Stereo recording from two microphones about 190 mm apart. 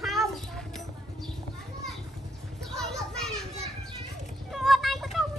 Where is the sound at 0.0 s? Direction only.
Centre (ahead or behind).